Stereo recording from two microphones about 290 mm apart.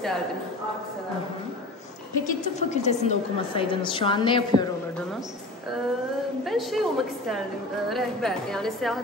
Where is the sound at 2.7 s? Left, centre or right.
Left.